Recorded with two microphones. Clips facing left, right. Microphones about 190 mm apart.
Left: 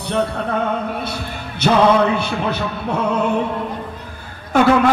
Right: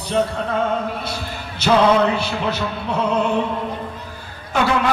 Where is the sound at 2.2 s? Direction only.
55° left (ahead or behind).